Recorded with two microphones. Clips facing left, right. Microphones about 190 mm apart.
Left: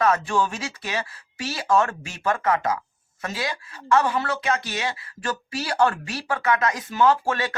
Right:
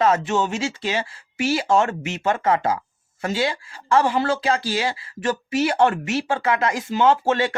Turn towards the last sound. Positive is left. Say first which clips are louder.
# right 2 dB
turn(degrees=-25)  # may be behind; listen again after turning